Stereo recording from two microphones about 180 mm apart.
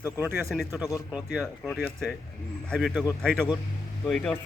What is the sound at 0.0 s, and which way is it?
Speech, 10° right (ahead or behind).